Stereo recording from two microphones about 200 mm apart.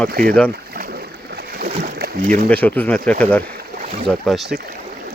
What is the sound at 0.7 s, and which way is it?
Boat, 50° right (ahead or behind).